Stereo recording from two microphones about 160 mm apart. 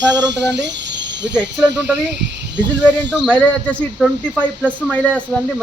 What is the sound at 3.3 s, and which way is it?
A man's voice, 5° left (ahead or behind).